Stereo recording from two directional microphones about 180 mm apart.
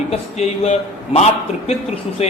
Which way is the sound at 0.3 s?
35° left (ahead or behind).